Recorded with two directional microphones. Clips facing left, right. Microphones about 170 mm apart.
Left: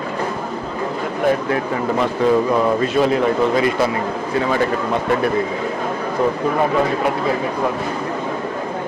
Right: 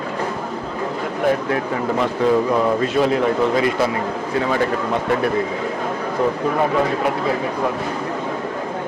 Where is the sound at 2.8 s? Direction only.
10° left (ahead or behind).